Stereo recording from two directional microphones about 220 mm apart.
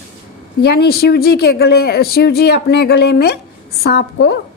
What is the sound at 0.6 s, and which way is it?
Speech, 45° left (ahead or behind).